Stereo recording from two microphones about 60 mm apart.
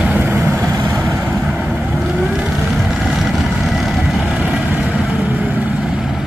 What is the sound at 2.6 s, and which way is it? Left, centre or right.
Vehicle, centre.